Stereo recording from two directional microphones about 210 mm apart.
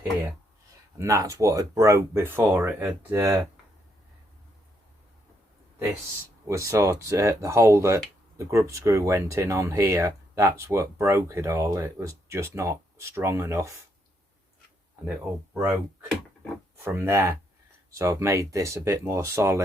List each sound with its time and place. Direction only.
0.9 s speech: 15° right (ahead or behind)
6.6 s speech: 15° right (ahead or behind)
15.0 s speech: 5° right (ahead or behind)